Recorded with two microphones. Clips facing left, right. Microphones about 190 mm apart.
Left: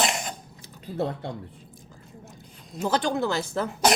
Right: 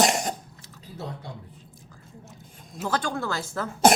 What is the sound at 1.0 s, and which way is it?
Speech, 60° left (ahead or behind).